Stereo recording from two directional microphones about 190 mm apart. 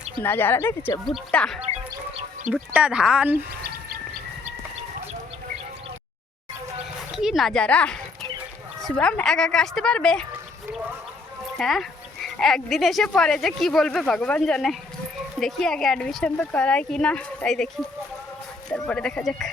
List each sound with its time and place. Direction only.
0.2 s speech: 10° left (ahead or behind)
1.6 s chicken: 35° right (ahead or behind)
2.5 s speech: 5° right (ahead or behind)
3.6 s chicken: 50° right (ahead or behind)
7.1 s speech: centre (ahead or behind)
11.5 s speech: centre (ahead or behind)
18.7 s speech: 5° left (ahead or behind)